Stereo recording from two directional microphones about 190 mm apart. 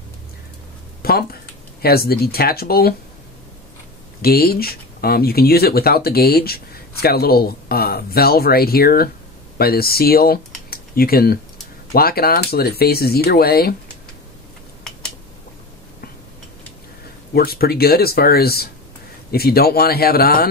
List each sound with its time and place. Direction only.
1.0 s a sound: 55° left (ahead or behind)
1.8 s speech: 55° left (ahead or behind)
4.2 s speech: 55° left (ahead or behind)
10.7 s typing: 50° left (ahead or behind)
11.9 s speech: 50° left (ahead or behind)
17.3 s speech: 55° left (ahead or behind)